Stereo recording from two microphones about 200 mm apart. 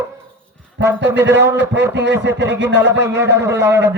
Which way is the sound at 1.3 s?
15° right (ahead or behind).